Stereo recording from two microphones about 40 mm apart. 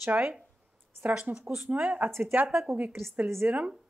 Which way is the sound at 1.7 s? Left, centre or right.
Right.